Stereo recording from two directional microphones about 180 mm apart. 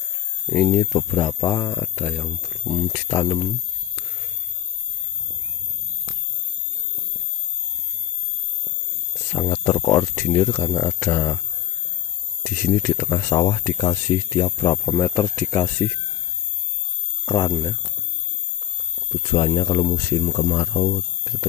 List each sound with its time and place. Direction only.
0.5 s speech: 15° left (ahead or behind)
9.4 s speech: 30° left (ahead or behind)
10.0 s speech: 10° left (ahead or behind)
12.4 s speech: 20° left (ahead or behind)
15.0 s speech: 5° left (ahead or behind)
17.2 s speech: 20° left (ahead or behind)
19.1 s speech: 25° left (ahead or behind)